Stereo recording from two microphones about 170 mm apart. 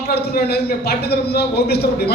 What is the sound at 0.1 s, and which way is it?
A woman's voice, 70° left (ahead or behind).